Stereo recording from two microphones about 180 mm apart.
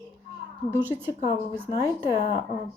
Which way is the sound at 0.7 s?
10° right (ahead or behind).